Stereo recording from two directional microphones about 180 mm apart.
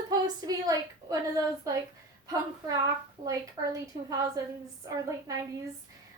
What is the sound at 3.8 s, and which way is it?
Speech, 20° right (ahead or behind).